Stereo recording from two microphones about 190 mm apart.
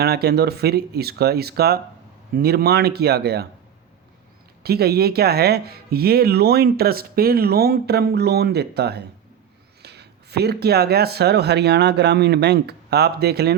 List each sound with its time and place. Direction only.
0.0 s speech: 55° right (ahead or behind)
4.6 s speech: 55° right (ahead or behind)